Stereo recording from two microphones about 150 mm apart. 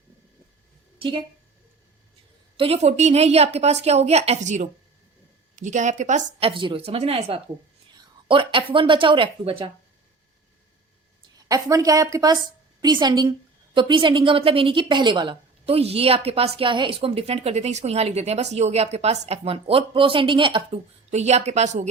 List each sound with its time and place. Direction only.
0.9 s speech: 35° right (ahead or behind)
2.6 s a woman's voice: 45° right (ahead or behind)
6.5 s a woman's voice: 35° right (ahead or behind)
11.4 s a woman's voice: 25° right (ahead or behind)
21.1 s a woman's voice: 45° right (ahead or behind)